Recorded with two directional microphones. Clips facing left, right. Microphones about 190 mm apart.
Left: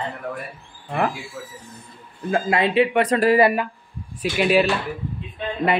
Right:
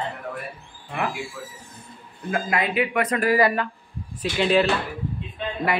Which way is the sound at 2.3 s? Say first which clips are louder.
Left 5 dB; 30° left (ahead or behind).